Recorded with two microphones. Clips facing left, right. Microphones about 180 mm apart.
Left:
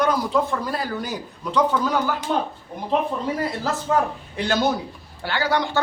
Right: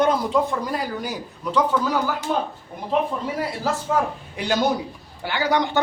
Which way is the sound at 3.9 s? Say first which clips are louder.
Left 2 dB; 5° right (ahead or behind).